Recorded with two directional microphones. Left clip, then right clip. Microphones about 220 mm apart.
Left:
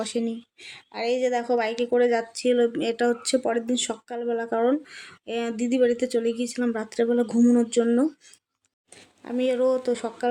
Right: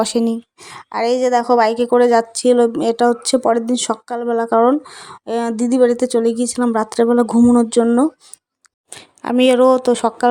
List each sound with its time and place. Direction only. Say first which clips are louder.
0.0 s a woman's voice: right 11 dB; 35° right (ahead or behind)
8.9 s a woman's voice: right 12 dB; 45° right (ahead or behind)